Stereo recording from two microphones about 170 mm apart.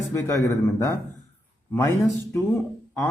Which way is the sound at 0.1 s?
20° left (ahead or behind).